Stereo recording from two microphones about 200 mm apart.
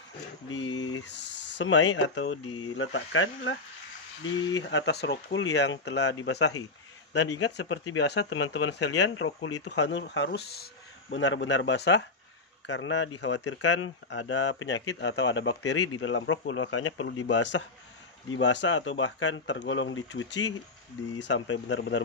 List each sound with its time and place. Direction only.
0.7 s a sound: 90° left
1.6 s speech: 70° left (ahead or behind)
4.6 s speech: 60° left (ahead or behind); by 17.1 s 85° left
17.3 s speech: 65° left (ahead or behind)